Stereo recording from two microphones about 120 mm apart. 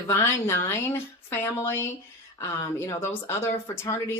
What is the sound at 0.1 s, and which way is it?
Speech, 20° left (ahead or behind).